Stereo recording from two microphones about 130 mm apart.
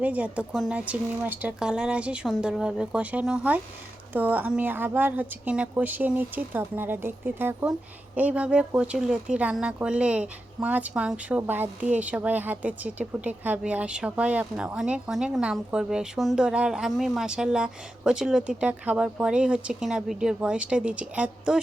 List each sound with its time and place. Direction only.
0.0 s speech: 10° right (ahead or behind)